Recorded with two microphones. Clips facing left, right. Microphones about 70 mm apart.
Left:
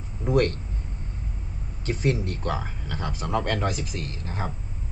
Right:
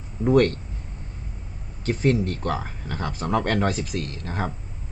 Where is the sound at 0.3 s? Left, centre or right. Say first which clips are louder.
Right 4 dB; right.